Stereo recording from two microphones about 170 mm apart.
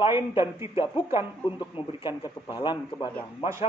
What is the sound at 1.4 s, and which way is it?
Speech, 30° left (ahead or behind).